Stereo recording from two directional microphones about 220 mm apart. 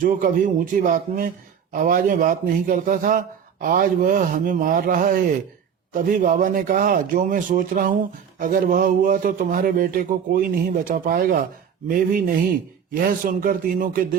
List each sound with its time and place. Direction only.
0.0 s speech: 40° right (ahead or behind)